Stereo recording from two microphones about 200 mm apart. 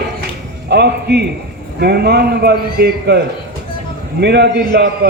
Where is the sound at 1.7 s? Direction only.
55° right (ahead or behind).